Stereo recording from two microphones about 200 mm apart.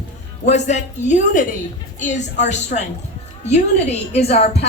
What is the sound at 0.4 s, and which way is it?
Speech, 35° left (ahead or behind).